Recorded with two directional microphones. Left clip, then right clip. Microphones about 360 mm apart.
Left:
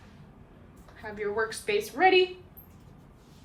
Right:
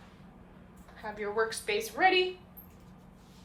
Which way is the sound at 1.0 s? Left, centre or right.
Centre.